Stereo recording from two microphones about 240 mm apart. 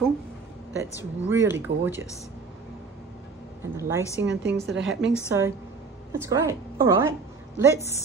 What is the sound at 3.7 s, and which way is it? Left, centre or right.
Speech, centre.